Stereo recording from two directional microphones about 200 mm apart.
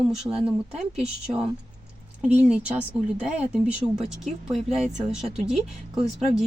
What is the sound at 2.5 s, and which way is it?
A woman's voice, 5° right (ahead or behind).